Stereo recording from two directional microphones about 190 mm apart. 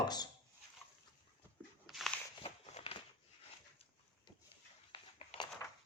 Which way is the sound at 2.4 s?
30° left (ahead or behind).